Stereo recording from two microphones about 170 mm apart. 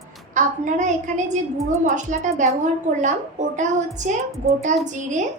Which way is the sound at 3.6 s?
45° right (ahead or behind).